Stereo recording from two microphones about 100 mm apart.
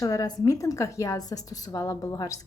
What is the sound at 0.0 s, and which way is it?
A woman's voice, 40° left (ahead or behind).